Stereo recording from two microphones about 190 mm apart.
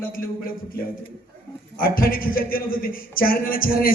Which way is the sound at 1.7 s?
50° left (ahead or behind).